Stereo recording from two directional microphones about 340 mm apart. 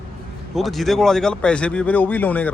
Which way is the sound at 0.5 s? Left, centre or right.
Centre.